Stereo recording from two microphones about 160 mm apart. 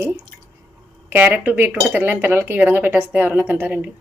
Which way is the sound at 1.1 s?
10° right (ahead or behind).